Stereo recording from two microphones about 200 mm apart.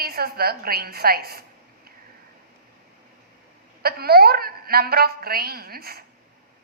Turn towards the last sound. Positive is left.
turn(degrees=-50)  # may be behind; listen again after turning